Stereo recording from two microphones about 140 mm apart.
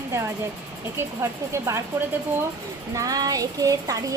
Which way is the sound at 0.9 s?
20° right (ahead or behind).